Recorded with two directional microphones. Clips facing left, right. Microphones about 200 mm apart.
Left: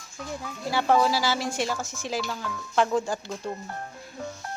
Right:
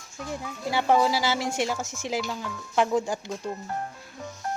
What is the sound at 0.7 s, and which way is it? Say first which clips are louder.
Speech: even; 15° right (ahead or behind).